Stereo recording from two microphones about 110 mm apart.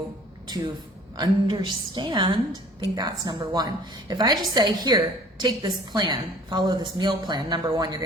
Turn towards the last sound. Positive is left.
turn(degrees=-40)  # may be behind; listen again after turning